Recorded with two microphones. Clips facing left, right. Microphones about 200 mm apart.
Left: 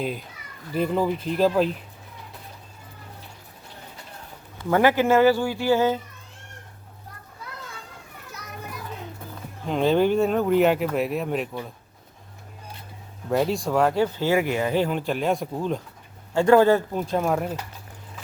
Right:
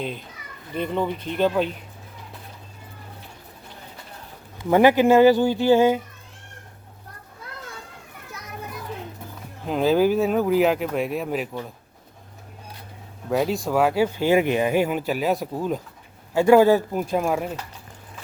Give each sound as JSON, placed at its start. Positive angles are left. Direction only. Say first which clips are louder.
{"t": 0.0, "sound": "speech", "louder": "left 2 dB", "side_deg": 5}
{"t": 4.7, "sound": "speech", "louder": "right 3 dB", "side_deg": -15}
{"t": 9.6, "sound": "speech", "louder": "right 1 dB", "side_deg": -5}
{"t": 13.3, "sound": "speech", "louder": "even", "side_deg": 0}